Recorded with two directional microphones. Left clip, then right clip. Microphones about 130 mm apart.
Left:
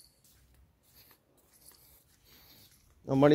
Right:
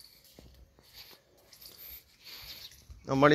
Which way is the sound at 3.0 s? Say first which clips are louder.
Right 1 dB; 65° left (ahead or behind).